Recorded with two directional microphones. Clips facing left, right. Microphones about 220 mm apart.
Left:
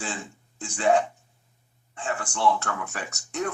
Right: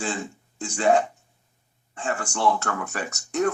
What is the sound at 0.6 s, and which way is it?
Speech, 45° right (ahead or behind).